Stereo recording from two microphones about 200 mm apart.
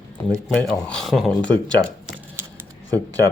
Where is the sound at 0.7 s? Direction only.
Centre (ahead or behind).